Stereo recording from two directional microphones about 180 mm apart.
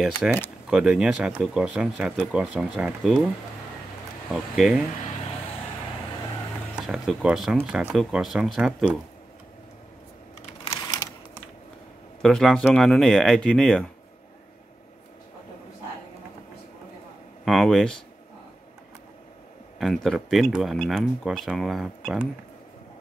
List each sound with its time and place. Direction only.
0.0 s speech: centre (ahead or behind)
4.3 s speech: 5° right (ahead or behind)
6.7 s speech: centre (ahead or behind)
10.7 s typewriter: 20° left (ahead or behind)
12.2 s speech: centre (ahead or behind)
17.5 s speech: centre (ahead or behind)
19.8 s speech: centre (ahead or behind)